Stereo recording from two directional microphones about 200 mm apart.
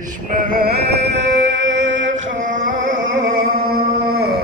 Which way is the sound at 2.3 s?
40° right (ahead or behind).